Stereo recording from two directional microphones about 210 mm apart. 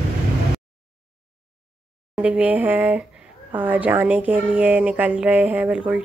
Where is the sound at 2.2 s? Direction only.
5° right (ahead or behind).